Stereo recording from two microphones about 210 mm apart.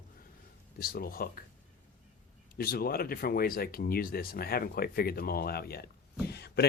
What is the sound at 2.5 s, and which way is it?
Speech, 45° left (ahead or behind).